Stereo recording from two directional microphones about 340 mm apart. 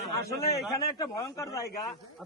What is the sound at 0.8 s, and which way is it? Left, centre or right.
Speech, centre.